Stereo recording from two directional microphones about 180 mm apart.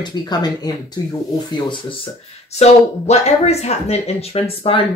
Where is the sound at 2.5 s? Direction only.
35° left (ahead or behind).